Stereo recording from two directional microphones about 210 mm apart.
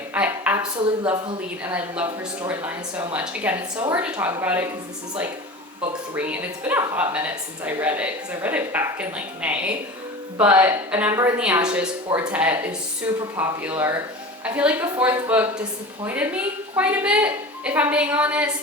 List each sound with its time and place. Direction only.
0.1 s a sound: 10° right (ahead or behind)
1.6 s a woman's voice: 5° right (ahead or behind)
6.1 s a woman's voice: 5° right (ahead or behind)